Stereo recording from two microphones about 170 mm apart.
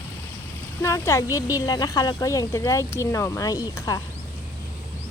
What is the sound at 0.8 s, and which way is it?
A woman's voice, 15° left (ahead or behind).